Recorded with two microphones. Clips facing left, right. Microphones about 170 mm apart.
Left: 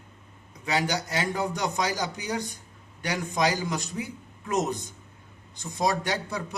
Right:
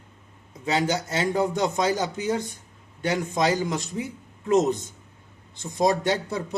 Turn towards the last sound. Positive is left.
turn(degrees=-25)  # may be behind; listen again after turning